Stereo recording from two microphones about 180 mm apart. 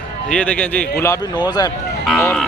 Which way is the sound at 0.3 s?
5° left (ahead or behind).